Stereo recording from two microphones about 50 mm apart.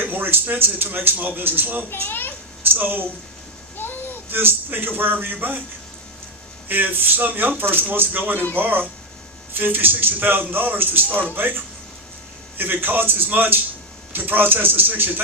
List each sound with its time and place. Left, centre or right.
0.0 s a man's voice: right
1.9 s a child's voice: left
2.7 s a man's voice: right
3.8 s music: left
4.3 s speech: right
6.7 s a man's voice: right